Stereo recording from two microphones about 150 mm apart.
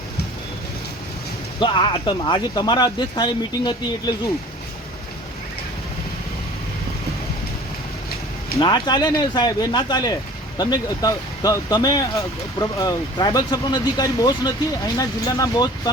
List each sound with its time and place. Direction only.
1.5 s speech: 30° left (ahead or behind)
8.5 s speech: 30° left (ahead or behind)